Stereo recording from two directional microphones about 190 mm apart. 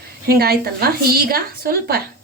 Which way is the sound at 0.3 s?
55° right (ahead or behind).